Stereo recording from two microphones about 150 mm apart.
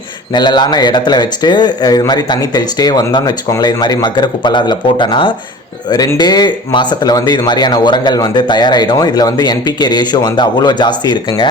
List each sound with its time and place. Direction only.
0.3 s speech: 30° left (ahead or behind)